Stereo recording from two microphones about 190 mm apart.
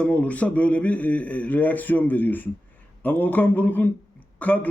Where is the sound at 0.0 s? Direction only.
5° left (ahead or behind).